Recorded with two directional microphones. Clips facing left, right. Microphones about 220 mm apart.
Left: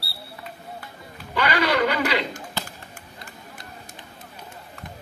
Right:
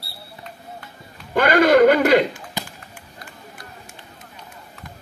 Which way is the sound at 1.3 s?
50° right (ahead or behind).